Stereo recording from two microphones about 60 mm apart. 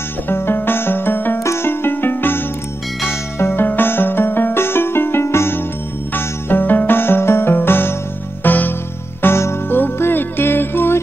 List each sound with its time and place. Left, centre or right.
0.3 s music: left
1.4 s music: left
6.1 s music: left
9.2 s music: left